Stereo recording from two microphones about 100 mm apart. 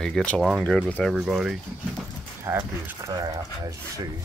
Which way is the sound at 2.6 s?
40° right (ahead or behind).